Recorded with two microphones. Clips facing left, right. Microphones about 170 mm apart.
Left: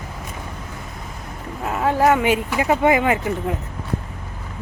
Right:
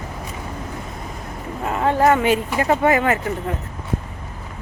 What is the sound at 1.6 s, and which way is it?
Speech, centre (ahead or behind).